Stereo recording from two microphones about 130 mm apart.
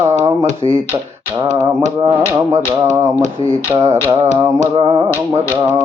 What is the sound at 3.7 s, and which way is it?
Speech, 20° right (ahead or behind).